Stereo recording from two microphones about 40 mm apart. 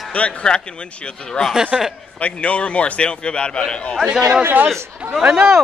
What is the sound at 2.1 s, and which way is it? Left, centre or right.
A man's voice, left.